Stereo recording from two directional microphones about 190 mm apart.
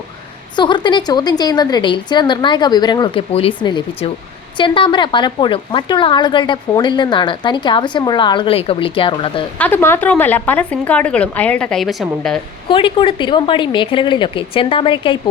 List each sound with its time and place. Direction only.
0.5 s a woman's voice: 25° left (ahead or behind)
9.6 s speech: 10° left (ahead or behind)
12.6 s a woman's voice: 30° left (ahead or behind)